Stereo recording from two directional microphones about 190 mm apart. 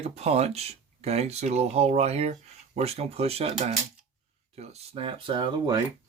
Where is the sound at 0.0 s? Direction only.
35° right (ahead or behind).